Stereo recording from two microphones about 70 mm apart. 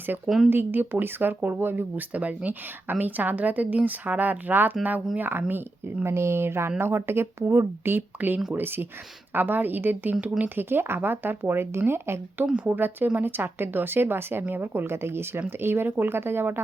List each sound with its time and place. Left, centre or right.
0.3 s speech: centre
0.5 s a woman's voice: right
12.5 s a woman's voice: right